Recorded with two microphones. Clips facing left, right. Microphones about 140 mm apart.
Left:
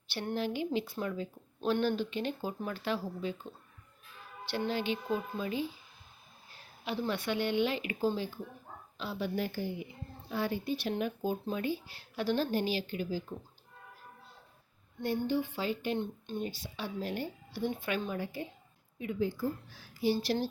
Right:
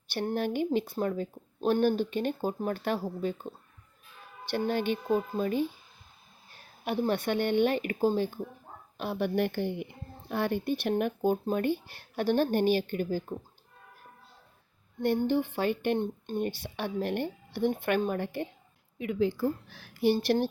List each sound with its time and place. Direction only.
0.1 s speech: 50° right (ahead or behind)
6.8 s a woman's voice: 50° right (ahead or behind)
15.0 s a woman's voice: 60° right (ahead or behind)
18.9 s a woman's voice: 85° right; by 20.5 s 60° right (ahead or behind)